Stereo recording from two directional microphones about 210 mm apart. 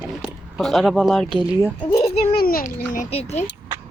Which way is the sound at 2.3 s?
45° left (ahead or behind).